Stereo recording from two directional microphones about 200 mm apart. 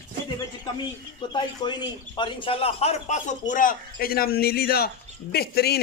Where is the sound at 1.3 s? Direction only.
25° left (ahead or behind).